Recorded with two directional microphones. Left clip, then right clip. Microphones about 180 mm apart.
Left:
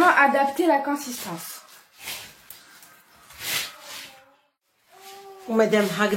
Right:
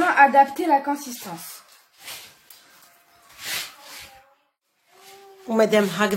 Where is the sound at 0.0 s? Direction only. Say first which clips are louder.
Right 2 dB; 35° right (ahead or behind).